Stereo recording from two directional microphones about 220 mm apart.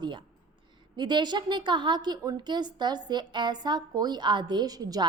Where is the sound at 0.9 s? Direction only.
20° right (ahead or behind).